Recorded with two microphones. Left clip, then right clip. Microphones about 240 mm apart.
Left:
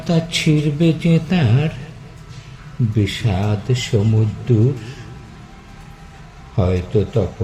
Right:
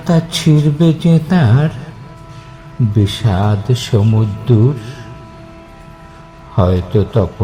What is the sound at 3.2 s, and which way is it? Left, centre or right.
Speech, centre.